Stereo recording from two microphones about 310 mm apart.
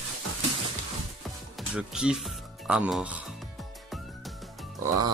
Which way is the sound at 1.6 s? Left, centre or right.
Centre.